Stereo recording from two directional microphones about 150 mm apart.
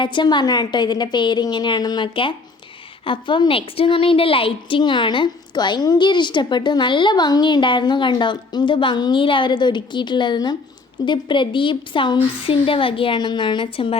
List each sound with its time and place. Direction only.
0.0 s a woman's voice: 30° left (ahead or behind)